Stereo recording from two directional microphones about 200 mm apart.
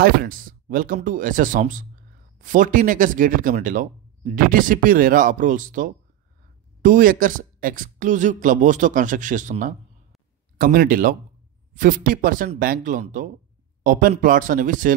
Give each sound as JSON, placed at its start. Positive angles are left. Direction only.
{"t": 0.0, "sound": "speech", "side_deg": -45}